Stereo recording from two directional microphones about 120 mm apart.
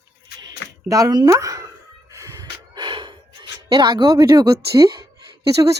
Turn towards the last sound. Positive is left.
turn(degrees=-30)  # may be behind; listen again after turning